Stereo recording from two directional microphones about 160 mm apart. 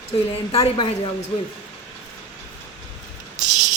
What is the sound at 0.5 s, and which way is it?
Speech, 40° left (ahead or behind).